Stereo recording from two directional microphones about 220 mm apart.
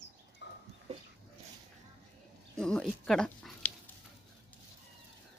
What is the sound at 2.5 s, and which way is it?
Speech, centre (ahead or behind).